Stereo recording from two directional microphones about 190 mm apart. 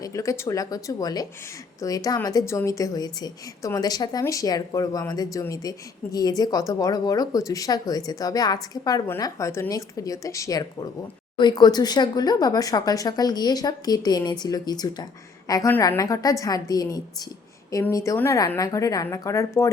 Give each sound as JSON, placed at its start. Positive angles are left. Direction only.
{"t": 0.0, "sound": "a woman's voice", "side_deg": 15}